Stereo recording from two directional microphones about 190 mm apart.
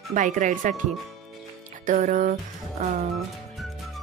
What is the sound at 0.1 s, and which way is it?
Speech, 40° right (ahead or behind).